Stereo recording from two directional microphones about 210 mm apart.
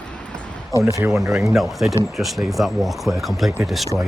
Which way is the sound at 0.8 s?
15° right (ahead or behind).